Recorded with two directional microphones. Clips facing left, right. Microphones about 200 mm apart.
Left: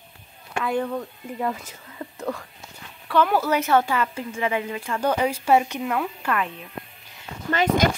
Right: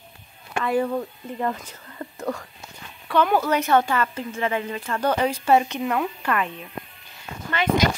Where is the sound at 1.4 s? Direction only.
5° left (ahead or behind).